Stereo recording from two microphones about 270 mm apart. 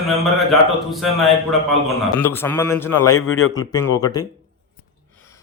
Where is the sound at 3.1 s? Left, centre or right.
Left.